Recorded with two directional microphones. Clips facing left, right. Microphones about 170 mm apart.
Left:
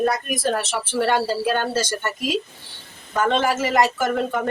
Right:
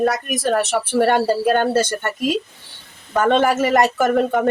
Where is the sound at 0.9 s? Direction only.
50° right (ahead or behind).